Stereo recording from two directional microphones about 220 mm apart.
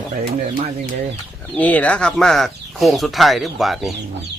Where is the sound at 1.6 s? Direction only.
5° left (ahead or behind).